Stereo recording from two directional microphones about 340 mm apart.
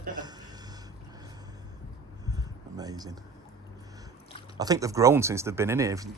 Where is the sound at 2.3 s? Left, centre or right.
Centre.